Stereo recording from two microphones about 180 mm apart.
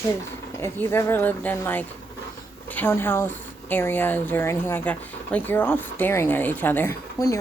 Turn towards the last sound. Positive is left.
turn(degrees=20)  # may be behind; listen again after turning